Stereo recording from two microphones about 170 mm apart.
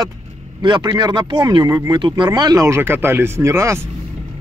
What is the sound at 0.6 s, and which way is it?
Speech, 25° right (ahead or behind).